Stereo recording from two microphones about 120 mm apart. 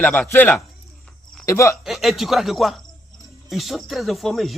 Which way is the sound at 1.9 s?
Centre (ahead or behind).